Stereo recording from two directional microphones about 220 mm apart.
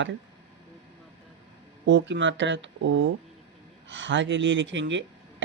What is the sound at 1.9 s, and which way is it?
Speech, 55° right (ahead or behind).